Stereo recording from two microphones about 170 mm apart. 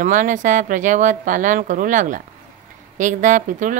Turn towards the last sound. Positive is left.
turn(degrees=-50)  # may be behind; listen again after turning